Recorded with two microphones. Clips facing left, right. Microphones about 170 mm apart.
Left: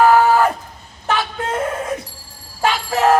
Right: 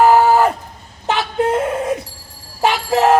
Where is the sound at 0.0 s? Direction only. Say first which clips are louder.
Right 1 dB; 25° right (ahead or behind).